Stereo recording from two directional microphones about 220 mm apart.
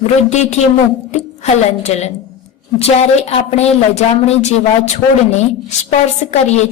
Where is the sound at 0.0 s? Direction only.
30° left (ahead or behind).